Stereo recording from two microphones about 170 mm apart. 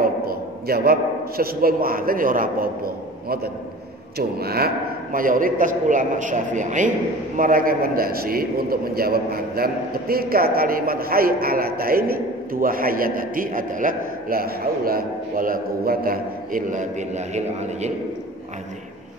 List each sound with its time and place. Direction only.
0.0 s a man's voice: 60° right (ahead or behind); by 17.9 s 40° right (ahead or behind)